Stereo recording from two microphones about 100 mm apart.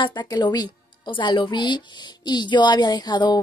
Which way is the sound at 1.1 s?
55° left (ahead or behind).